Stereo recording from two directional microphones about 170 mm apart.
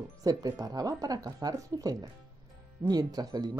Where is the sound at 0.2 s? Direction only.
20° right (ahead or behind).